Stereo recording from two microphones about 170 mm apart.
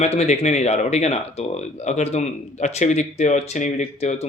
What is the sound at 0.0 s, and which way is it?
Speech, 40° left (ahead or behind).